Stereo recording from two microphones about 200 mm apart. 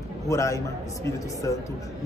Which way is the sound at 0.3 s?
15° left (ahead or behind).